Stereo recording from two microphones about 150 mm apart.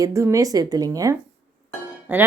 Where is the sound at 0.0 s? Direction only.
20° right (ahead or behind).